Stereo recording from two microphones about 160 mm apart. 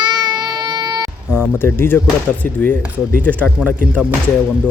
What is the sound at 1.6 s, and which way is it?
Speech, 15° left (ahead or behind).